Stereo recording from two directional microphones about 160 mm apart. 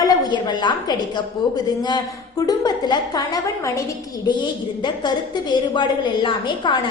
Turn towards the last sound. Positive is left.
turn(degrees=30)  # may be behind; listen again after turning